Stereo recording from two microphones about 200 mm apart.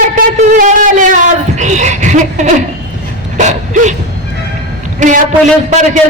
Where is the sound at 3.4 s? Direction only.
35° right (ahead or behind).